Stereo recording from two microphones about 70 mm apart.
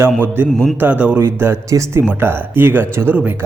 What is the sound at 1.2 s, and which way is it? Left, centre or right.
A man's voice, right.